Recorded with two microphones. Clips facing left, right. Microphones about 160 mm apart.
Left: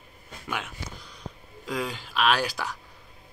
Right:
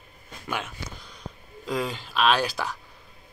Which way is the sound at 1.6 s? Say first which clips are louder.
Right 2 dB; 10° left (ahead or behind).